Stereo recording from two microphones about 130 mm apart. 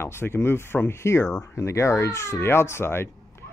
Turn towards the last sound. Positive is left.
turn(degrees=20)  # may be behind; listen again after turning